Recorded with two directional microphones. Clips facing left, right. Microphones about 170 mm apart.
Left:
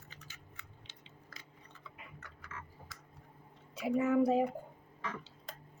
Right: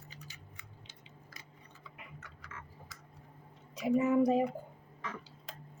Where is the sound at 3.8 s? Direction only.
40° right (ahead or behind).